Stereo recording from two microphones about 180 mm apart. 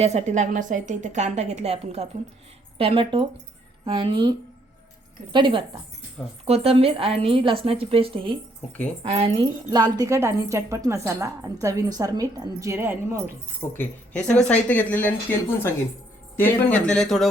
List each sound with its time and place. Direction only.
0.0 s a woman's voice: 40° right (ahead or behind); by 13.3 s 15° right (ahead or behind)
13.7 s speech: 10° left (ahead or behind)